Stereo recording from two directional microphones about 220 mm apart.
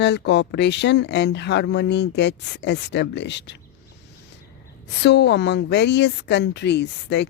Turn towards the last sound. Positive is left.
turn(degrees=50)  # may be behind; listen again after turning